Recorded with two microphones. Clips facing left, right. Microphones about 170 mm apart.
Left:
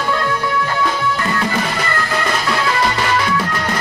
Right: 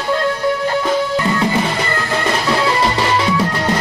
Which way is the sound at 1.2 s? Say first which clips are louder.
Right 3 dB; 20° right (ahead or behind).